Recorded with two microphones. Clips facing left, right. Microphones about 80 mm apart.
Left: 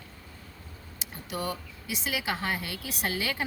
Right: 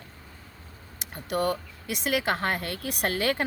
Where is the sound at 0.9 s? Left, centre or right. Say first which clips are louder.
Right 7 dB; right.